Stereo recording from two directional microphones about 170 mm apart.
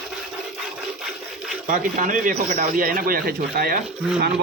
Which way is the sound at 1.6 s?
50° right (ahead or behind).